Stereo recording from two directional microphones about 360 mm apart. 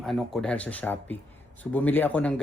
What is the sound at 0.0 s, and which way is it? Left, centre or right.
Speech, centre.